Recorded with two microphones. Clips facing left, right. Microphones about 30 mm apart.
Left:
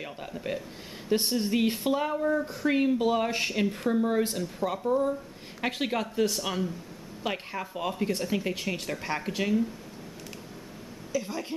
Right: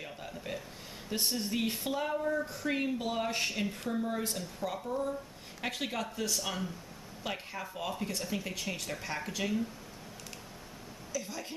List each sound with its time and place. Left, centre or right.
0.0 s speech: centre
11.1 s a woman's voice: left